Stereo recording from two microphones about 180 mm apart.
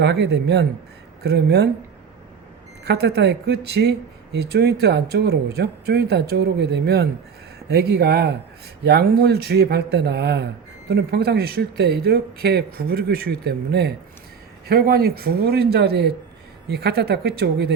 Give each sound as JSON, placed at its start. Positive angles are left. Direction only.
{"t": 0.0, "sound": "speech", "side_deg": -70}
{"t": 2.8, "sound": "speech", "side_deg": -65}